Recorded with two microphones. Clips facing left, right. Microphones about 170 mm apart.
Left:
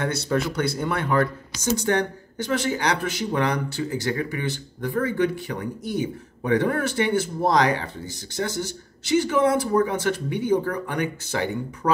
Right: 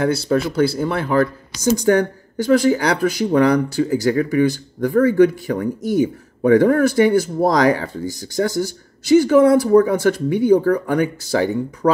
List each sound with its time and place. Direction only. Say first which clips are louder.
0.0 s speech: right 6 dB; 30° right (ahead or behind)